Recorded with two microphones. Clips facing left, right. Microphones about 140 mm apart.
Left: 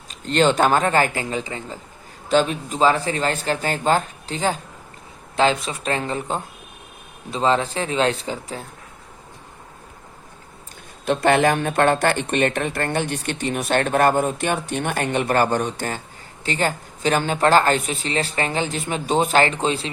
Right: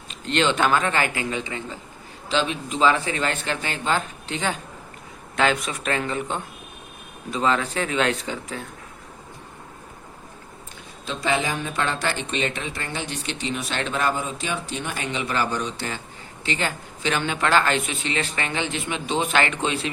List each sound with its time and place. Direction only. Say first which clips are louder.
0.1 s speech: left 4 dB; 40° left (ahead or behind)
11.0 s speech: left 8 dB; 60° left (ahead or behind); by 19.9 s 30° left (ahead or behind)